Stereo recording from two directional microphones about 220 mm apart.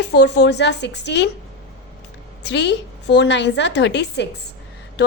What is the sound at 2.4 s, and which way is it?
A woman's voice, 50° left (ahead or behind).